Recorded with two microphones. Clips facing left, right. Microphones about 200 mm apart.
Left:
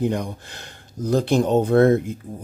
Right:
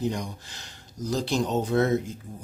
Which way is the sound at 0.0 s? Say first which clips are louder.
Left 6 dB; 55° left (ahead or behind).